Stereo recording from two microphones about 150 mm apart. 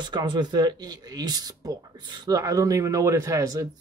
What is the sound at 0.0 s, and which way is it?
Speech, 30° right (ahead or behind).